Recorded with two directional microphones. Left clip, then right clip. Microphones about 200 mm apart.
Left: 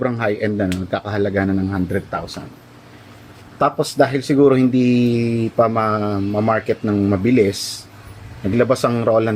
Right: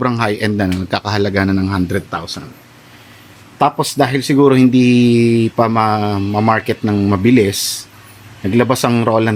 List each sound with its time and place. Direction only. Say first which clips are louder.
0.0 s speech: right 3 dB; 55° right (ahead or behind)
3.6 s speech: right 2 dB; 55° right (ahead or behind)
8.5 s speech: right 2 dB; 55° right (ahead or behind)